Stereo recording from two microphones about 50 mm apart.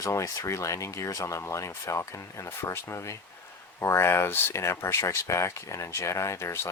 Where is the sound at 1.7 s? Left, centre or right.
Left.